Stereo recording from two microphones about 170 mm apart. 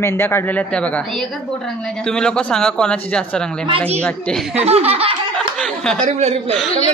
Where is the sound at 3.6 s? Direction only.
35° right (ahead or behind).